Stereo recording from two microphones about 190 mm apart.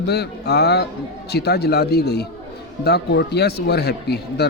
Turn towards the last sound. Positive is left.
turn(degrees=60)  # may be behind; listen again after turning